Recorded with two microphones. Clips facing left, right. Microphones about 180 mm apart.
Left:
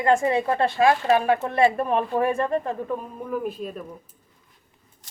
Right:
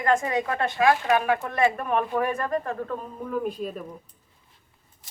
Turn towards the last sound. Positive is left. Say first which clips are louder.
# even
turn(degrees=0)  # may be behind; listen again after turning